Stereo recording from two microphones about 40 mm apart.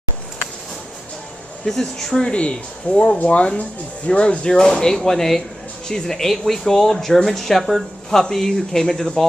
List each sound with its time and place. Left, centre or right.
1.7 s speech: centre
2.3 s speech: left
3.2 s speech: left
4.5 s speech: centre